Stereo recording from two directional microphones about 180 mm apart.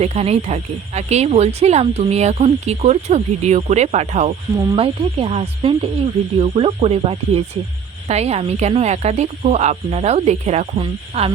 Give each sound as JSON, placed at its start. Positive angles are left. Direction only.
{"t": 0.0, "sound": "speech", "side_deg": -35}